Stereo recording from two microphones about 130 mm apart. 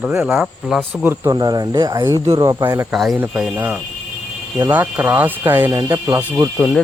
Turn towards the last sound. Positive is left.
turn(degrees=-5)  # may be behind; listen again after turning